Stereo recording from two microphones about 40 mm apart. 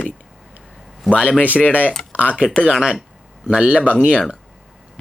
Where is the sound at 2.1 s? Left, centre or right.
Right.